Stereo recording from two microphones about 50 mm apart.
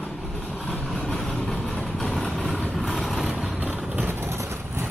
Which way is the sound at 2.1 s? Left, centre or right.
Centre.